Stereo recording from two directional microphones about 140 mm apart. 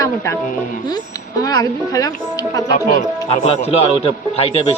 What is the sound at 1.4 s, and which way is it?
Speech, 25° left (ahead or behind).